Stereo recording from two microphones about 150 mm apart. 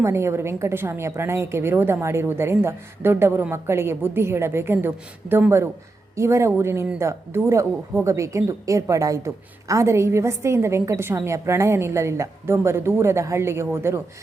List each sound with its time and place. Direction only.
0.0 s a woman's voice: 20° right (ahead or behind)